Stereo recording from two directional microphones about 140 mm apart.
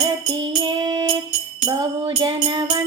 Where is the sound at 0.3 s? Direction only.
30° right (ahead or behind).